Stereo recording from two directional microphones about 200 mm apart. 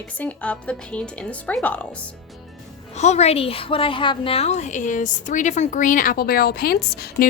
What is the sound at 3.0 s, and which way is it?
A woman's voice, 35° left (ahead or behind).